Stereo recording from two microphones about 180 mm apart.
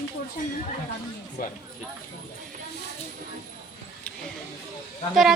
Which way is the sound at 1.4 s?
50° left (ahead or behind).